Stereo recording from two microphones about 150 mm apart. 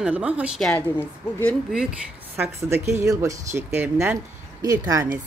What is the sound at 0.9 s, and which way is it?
Speech, 15° left (ahead or behind).